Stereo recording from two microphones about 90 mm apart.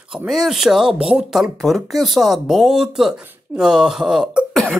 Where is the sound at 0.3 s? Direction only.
5° right (ahead or behind).